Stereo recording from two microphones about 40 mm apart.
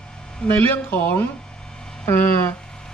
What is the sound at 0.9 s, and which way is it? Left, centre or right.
Speech, left.